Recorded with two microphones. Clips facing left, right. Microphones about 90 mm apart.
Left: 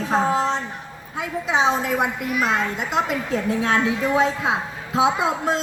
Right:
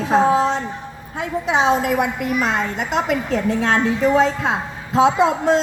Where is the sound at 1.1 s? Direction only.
60° right (ahead or behind).